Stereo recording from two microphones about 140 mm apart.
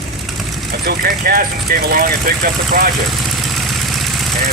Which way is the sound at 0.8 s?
90° right.